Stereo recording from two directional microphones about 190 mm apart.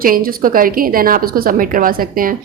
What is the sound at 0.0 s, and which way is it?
A woman's voice, 50° right (ahead or behind).